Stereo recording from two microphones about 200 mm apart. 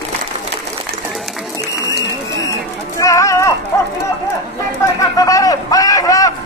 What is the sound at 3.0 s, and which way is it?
Bird, 15° left (ahead or behind).